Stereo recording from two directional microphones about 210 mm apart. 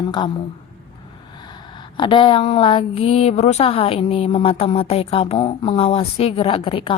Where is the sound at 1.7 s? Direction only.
20° left (ahead or behind).